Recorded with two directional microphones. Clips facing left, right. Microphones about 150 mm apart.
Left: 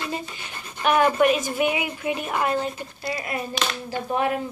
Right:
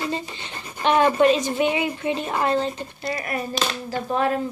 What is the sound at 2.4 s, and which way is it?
A woman's voice, 10° left (ahead or behind).